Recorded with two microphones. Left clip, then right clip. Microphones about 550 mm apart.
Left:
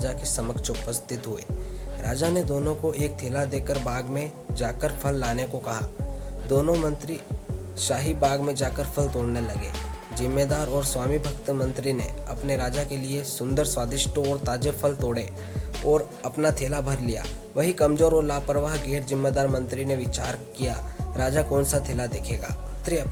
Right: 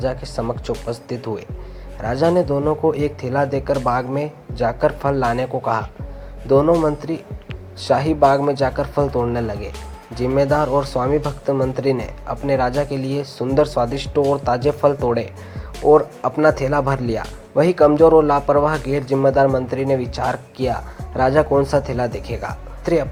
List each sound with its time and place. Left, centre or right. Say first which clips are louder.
0.0 s speech: right 8 dB; left